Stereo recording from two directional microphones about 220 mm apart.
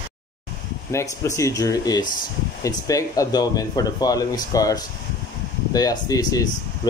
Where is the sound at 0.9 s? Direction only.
15° left (ahead or behind).